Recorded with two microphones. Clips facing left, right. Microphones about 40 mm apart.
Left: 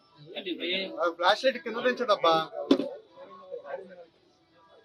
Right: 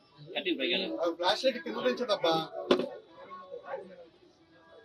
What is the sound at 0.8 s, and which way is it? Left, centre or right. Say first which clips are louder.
Speech: left 3 dB; left.